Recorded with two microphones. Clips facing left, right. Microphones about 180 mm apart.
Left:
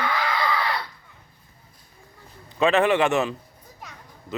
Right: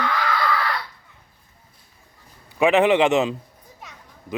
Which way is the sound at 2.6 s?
15° right (ahead or behind).